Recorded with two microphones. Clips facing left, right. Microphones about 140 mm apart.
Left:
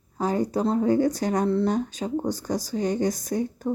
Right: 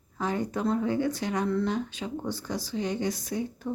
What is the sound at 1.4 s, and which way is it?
Speech, 30° left (ahead or behind).